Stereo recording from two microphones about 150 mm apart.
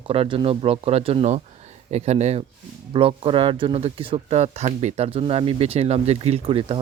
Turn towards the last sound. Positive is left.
turn(degrees=-35)  # may be behind; listen again after turning